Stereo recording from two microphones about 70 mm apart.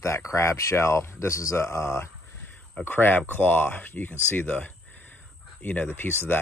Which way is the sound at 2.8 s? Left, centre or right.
Left.